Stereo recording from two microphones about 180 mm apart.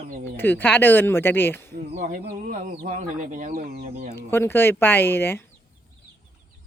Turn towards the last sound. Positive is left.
turn(degrees=10)  # may be behind; listen again after turning